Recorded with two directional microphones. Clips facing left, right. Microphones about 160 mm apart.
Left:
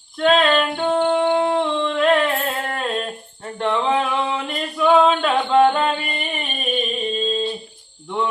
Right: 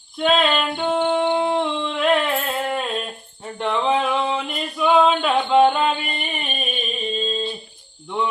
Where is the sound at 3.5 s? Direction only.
5° right (ahead or behind).